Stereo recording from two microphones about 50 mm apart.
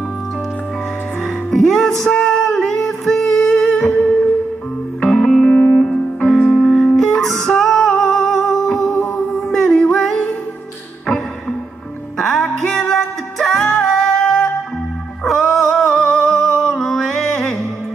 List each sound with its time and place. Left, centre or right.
1.2 s music: centre
5.5 s music: left
5.8 s music: centre
12.2 s music: centre
15.2 s music: centre
15.6 s music: centre